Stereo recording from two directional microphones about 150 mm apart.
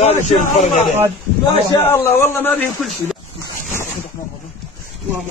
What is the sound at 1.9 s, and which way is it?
Speech, 15° left (ahead or behind).